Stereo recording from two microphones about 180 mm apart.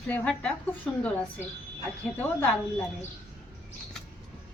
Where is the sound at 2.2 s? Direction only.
10° left (ahead or behind).